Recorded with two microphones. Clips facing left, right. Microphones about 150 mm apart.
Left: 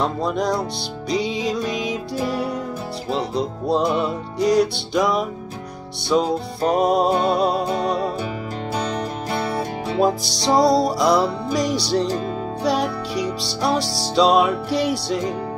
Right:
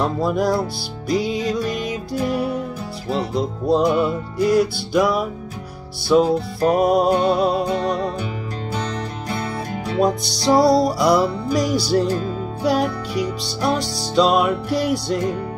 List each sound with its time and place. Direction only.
0.0 s music: 5° right (ahead or behind)
9.3 s music: 30° left (ahead or behind)
10.0 s music: centre (ahead or behind)